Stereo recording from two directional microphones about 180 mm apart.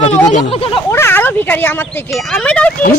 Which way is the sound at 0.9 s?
15° left (ahead or behind).